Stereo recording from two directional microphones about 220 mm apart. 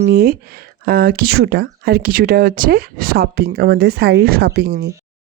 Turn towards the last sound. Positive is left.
turn(degrees=-45)  # may be behind; listen again after turning